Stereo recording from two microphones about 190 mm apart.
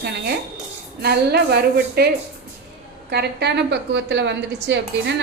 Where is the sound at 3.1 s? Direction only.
60° right (ahead or behind).